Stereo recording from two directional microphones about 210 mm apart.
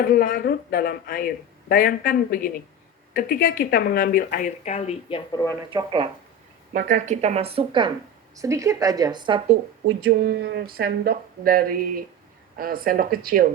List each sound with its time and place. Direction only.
0.0 s a woman's voice: 45° left (ahead or behind); by 5.4 s 25° left (ahead or behind)
5.7 s speech: 25° right (ahead or behind)
6.7 s speech: 40° right (ahead or behind); by 9.6 s 25° right (ahead or behind)
10.1 s speech: 50° right (ahead or behind)